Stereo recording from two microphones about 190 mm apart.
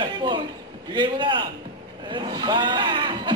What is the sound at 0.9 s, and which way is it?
Speech, 25° right (ahead or behind).